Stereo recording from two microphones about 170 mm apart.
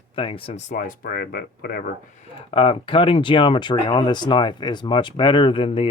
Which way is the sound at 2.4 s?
35° left (ahead or behind).